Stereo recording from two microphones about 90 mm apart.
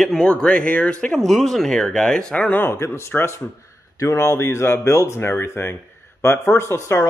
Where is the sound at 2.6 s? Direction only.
30° left (ahead or behind).